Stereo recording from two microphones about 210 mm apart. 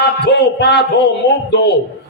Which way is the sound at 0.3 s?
55° left (ahead or behind).